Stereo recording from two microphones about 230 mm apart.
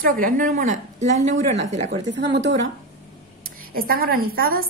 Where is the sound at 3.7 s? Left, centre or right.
Right.